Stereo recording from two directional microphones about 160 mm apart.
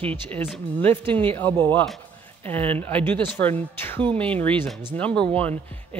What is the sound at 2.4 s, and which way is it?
A woman's voice, 10° left (ahead or behind).